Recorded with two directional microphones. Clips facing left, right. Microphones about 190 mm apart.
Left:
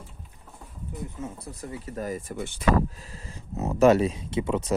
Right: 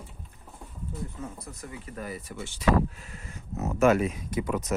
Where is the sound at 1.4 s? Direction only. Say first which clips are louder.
Left 4 dB; 35° left (ahead or behind); by 2.6 s 55° left (ahead or behind).